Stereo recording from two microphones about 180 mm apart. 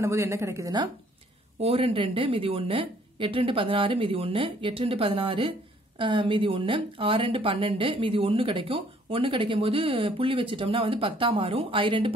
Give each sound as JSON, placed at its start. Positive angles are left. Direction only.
{"t": 0.0, "sound": "speech", "side_deg": -15}
{"t": 1.6, "sound": "a woman's voice", "side_deg": -35}